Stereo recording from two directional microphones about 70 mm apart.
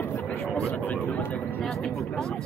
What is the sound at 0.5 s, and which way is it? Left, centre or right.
Speech, centre.